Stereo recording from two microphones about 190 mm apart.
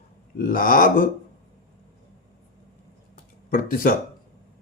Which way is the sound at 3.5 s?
45° left (ahead or behind).